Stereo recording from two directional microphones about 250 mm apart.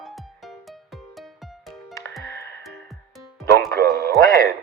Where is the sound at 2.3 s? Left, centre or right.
Centre.